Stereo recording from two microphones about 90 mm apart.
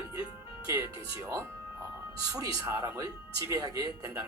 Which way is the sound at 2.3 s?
35° right (ahead or behind).